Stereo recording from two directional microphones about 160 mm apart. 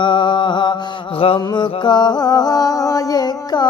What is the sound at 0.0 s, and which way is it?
Mantra, 30° left (ahead or behind).